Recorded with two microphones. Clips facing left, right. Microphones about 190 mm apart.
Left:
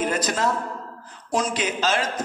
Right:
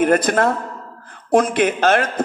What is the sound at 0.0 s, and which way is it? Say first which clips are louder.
A man's voice: right 8 dB; 55° right (ahead or behind).